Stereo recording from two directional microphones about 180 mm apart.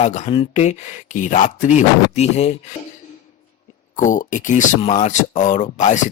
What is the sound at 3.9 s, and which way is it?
Speech, 45° left (ahead or behind).